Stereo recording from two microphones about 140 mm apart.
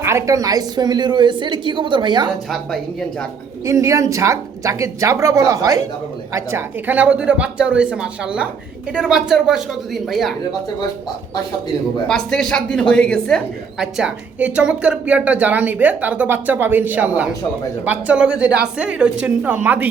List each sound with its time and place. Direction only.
0.0 s a woman's voice: 20° right (ahead or behind); by 2.3 s 35° right (ahead or behind)
3.7 s a woman's voice: 20° right (ahead or behind); by 10.3 s centre (ahead or behind)
12.0 s a woman's voice: 5° left (ahead or behind); by 19.9 s 10° right (ahead or behind)